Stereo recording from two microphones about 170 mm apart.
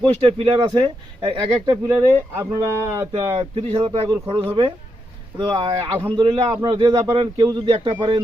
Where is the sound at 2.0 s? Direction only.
15° right (ahead or behind); by 4.0 s 30° right (ahead or behind).